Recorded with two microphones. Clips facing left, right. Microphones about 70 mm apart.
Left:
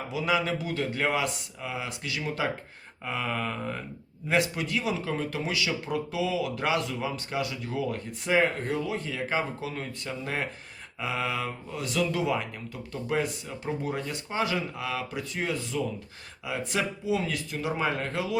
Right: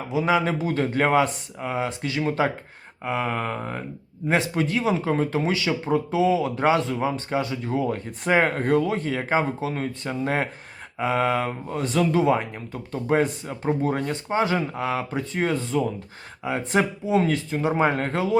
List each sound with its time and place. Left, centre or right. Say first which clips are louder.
0.1 s speech: right 6 dB; right
3.0 s mantra: right 5 dB; right
4.3 s speech: right 4 dB; right
8.2 s speech: right 4 dB; right